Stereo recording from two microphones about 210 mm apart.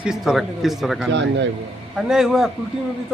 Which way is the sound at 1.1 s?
60° right (ahead or behind).